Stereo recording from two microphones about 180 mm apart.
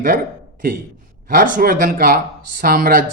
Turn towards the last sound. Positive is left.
turn(degrees=-55)  # may be behind; listen again after turning